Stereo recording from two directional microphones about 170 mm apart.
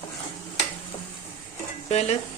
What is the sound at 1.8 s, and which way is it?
Speech, 40° left (ahead or behind).